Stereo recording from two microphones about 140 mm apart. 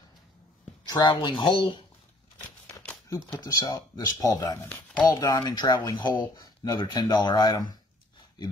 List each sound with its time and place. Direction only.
0.8 s speech: 30° left (ahead or behind)
3.5 s speech: 30° left (ahead or behind)
4.6 s speech: 15° left (ahead or behind)
5.2 s speech: 30° left (ahead or behind)